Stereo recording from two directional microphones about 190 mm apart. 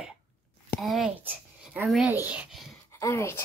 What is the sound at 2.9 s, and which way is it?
Speech, 15° left (ahead or behind).